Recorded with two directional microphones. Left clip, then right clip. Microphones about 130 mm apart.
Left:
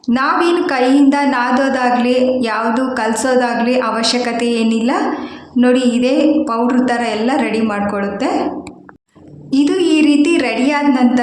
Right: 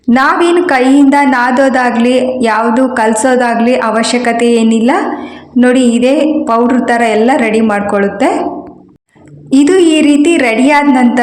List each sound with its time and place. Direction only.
0.1 s a woman's voice: 40° right (ahead or behind)
9.5 s a woman's voice: 45° right (ahead or behind)